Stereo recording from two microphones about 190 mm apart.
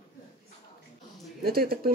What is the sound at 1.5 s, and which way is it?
Speech, 50° right (ahead or behind).